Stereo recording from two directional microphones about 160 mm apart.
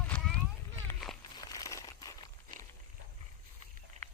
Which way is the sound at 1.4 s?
25° left (ahead or behind).